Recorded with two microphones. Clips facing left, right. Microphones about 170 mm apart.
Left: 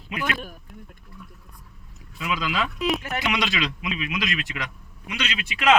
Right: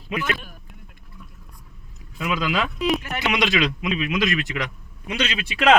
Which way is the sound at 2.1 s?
40° right (ahead or behind).